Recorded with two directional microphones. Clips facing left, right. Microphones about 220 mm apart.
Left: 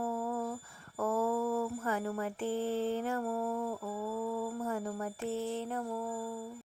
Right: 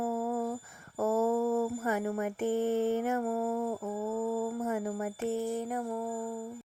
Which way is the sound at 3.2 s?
5° right (ahead or behind).